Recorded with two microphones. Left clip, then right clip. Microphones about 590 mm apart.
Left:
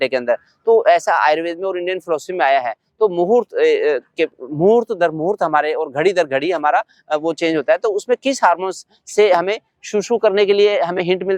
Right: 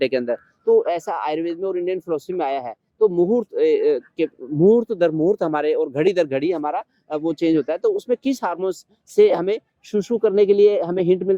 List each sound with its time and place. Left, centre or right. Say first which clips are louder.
0.0 s speech: left 4 dB; left